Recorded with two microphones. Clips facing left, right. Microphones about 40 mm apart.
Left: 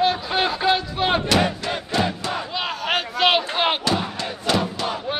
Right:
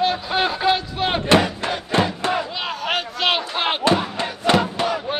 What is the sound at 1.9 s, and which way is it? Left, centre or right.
Crowd, right.